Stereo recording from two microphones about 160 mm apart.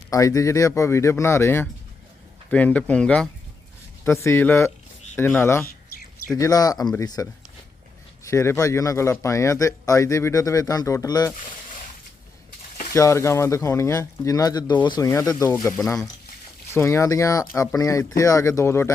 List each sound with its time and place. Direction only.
0.1 s a man's voice: 20° left (ahead or behind)
8.3 s a man's voice: 20° left (ahead or behind)
12.9 s a man's voice: 15° left (ahead or behind)
16.7 s a man's voice: 15° left (ahead or behind)